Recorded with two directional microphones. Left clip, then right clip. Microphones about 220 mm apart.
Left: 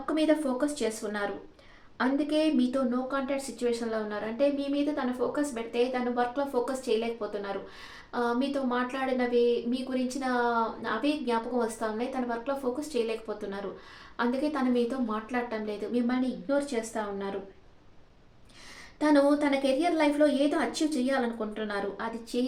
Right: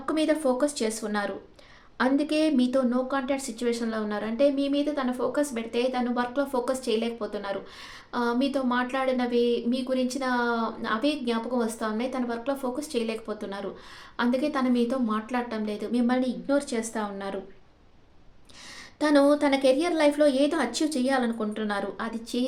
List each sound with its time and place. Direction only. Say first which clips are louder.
0.0 s a woman's voice: right 2 dB; 50° right (ahead or behind)
18.9 s a woman's voice: right 3 dB; 50° right (ahead or behind)